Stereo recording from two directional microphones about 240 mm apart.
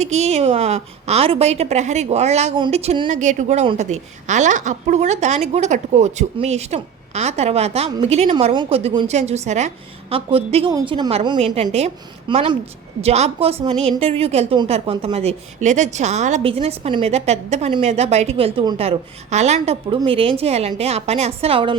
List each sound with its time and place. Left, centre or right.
0.0 s a woman's voice: right